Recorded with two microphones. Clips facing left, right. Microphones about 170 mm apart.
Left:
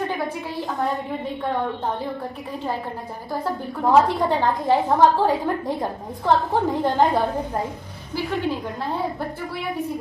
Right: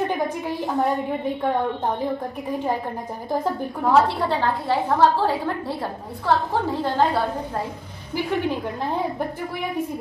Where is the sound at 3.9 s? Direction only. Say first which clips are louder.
Left 2 dB; 15° left (ahead or behind).